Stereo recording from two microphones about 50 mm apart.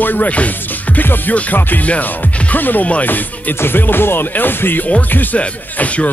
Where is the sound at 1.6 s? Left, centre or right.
Left.